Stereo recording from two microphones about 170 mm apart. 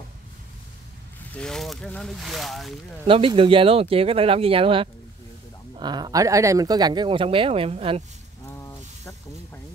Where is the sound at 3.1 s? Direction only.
30° right (ahead or behind).